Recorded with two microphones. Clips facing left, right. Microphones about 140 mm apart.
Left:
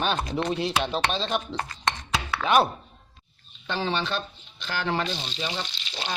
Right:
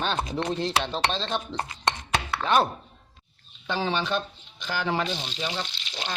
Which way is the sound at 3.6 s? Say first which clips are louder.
Right 1 dB; 10° right (ahead or behind).